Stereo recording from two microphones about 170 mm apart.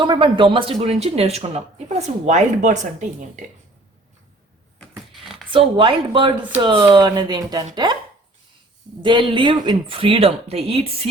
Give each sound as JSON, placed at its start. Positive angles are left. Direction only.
{"t": 0.0, "sound": "speech", "side_deg": -30}
{"t": 5.5, "sound": "speech", "side_deg": -30}
{"t": 9.0, "sound": "speech", "side_deg": -30}